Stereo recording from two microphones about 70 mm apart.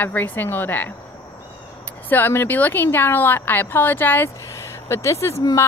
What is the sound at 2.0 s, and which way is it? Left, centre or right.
Speech, left.